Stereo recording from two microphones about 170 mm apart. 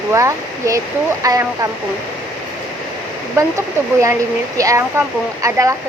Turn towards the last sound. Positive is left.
turn(degrees=-20)  # may be behind; listen again after turning